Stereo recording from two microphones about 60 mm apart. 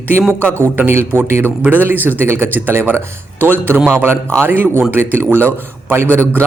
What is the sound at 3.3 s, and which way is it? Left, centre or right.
Speech, right.